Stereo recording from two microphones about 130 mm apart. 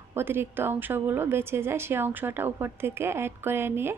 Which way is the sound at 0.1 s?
15° right (ahead or behind).